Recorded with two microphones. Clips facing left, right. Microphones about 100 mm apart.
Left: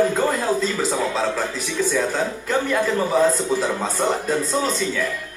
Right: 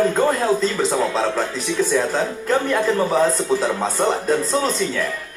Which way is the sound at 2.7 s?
Centre (ahead or behind).